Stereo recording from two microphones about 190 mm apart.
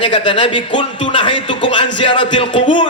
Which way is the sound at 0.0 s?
25° left (ahead or behind).